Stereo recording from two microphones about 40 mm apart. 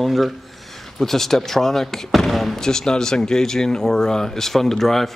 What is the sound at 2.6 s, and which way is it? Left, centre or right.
Speech, centre.